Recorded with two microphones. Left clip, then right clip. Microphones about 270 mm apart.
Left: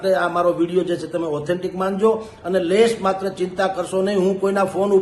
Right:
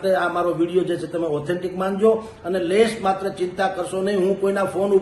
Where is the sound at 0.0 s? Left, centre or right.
Centre.